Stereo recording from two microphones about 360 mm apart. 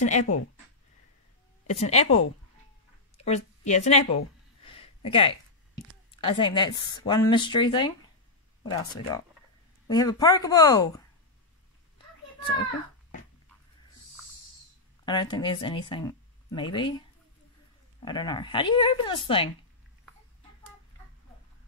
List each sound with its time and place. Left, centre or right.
0.0 s a woman's voice: centre
1.7 s speech: centre
3.3 s a woman's voice: centre
4.6 s a sound: centre
6.2 s speech: centre
9.8 s speech: centre
15.0 s speech: centre
18.0 s speech: centre